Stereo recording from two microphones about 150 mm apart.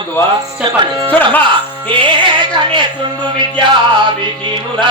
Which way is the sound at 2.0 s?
30° right (ahead or behind).